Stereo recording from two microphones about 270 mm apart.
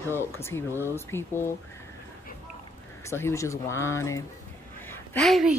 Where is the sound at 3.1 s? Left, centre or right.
Centre.